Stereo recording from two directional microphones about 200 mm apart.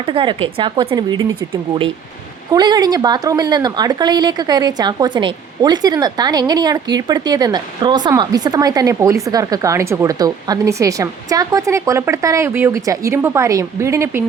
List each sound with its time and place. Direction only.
0.0 s speech: 25° right (ahead or behind)